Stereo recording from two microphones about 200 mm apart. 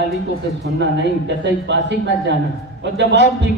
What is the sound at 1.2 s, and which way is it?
A man's voice, 60° right (ahead or behind).